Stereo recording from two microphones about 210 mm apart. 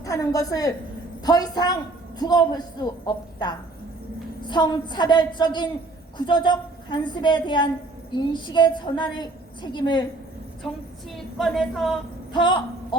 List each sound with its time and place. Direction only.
0.0 s a woman's voice: 15° left (ahead or behind)
10.6 s speech: centre (ahead or behind)
12.3 s speech: 20° left (ahead or behind)